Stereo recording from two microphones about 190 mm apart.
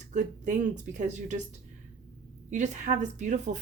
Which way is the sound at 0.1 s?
40° right (ahead or behind).